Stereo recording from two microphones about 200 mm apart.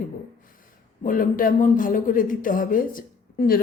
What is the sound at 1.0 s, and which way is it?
Speech, 45° left (ahead or behind).